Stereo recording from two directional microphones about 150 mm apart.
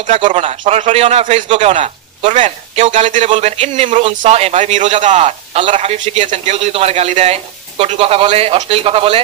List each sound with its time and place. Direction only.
0.3 s a man's voice: 45° right (ahead or behind)
2.2 s a man's voice: 55° right (ahead or behind)